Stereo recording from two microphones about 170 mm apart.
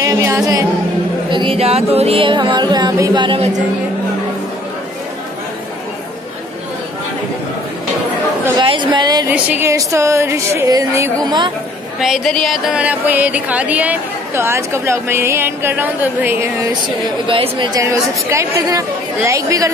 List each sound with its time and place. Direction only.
0.0 s music: 15° right (ahead or behind)
1.3 s music: 30° right (ahead or behind)
8.5 s a woman's voice: 30° right (ahead or behind)
9.3 s a sound: 10° right (ahead or behind)
12.0 s a sound: centre (ahead or behind)
17.3 s music: 30° right (ahead or behind)